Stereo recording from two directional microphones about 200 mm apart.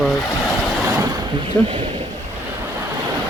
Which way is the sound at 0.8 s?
15° right (ahead or behind).